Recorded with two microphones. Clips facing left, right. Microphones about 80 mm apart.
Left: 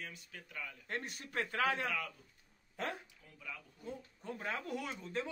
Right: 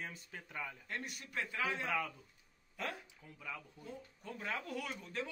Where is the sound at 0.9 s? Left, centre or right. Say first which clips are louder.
Left 2 dB; left.